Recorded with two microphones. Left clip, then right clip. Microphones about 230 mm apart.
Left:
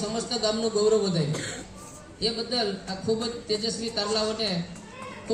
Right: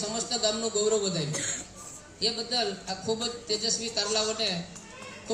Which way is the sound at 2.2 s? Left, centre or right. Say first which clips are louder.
Left 1 dB; centre.